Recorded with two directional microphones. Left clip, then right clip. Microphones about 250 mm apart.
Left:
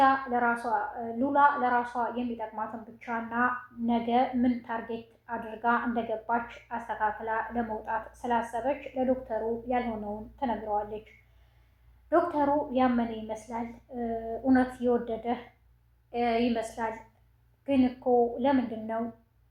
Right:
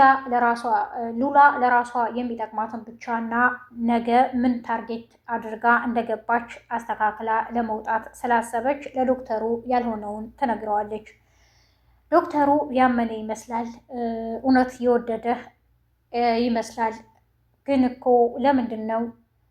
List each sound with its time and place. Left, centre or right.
0.0 s a woman's voice: right